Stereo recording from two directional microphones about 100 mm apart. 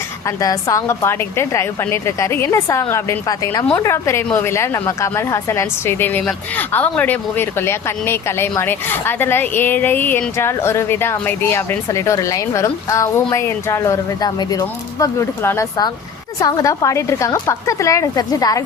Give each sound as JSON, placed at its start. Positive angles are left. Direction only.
{"t": 0.3, "sound": "a woman's voice", "side_deg": 35}
{"t": 3.8, "sound": "a woman's voice", "side_deg": 25}
{"t": 15.4, "sound": "a woman's voice", "side_deg": 25}
{"t": 16.4, "sound": "speech", "side_deg": 35}